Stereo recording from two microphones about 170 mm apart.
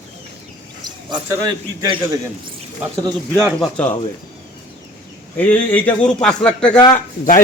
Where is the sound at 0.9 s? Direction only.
25° right (ahead or behind).